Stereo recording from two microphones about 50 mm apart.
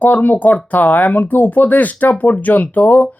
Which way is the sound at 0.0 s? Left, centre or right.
Left.